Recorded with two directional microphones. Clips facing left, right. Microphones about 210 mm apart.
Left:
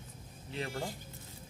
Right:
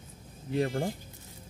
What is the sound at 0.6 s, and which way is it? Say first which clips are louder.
Speech: right 9 dB; 45° right (ahead or behind).